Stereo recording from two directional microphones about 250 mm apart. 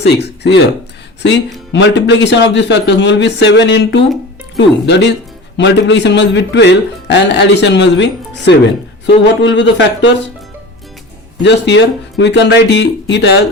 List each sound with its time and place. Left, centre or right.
0.0 s a man's voice: left
11.4 s a man's voice: left